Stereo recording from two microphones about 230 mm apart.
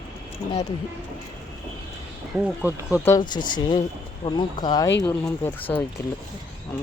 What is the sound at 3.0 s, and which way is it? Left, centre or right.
Speech, centre.